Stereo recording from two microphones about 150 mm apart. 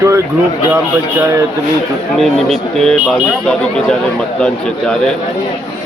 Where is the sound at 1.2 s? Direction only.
20° right (ahead or behind).